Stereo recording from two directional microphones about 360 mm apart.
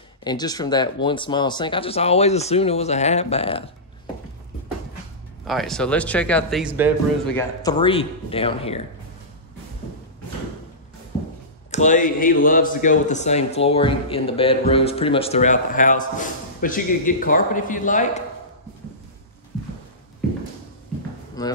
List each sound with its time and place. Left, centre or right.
0.2 s speech: centre
5.5 s a man's voice: centre
11.7 s speech: centre
21.4 s speech: centre